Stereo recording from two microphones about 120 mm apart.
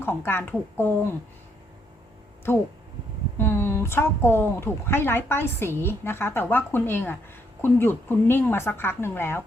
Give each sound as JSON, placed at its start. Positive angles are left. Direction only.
{"t": 0.0, "sound": "speech", "side_deg": 20}
{"t": 3.3, "sound": "speech", "side_deg": 20}